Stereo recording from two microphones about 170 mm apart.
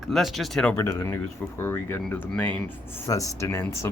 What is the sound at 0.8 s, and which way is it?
Speech, 20° left (ahead or behind).